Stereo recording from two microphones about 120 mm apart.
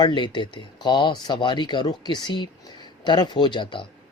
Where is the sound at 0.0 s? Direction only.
40° left (ahead or behind).